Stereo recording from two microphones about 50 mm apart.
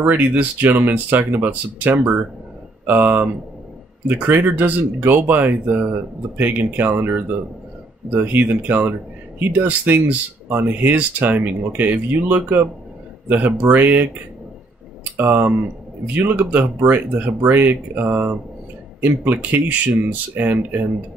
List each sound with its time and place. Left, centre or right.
0.0 s speech: right
15.1 s speech: right
20.4 s speech: right